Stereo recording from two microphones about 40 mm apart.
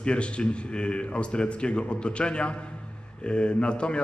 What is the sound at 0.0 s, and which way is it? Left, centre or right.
A man's voice, left.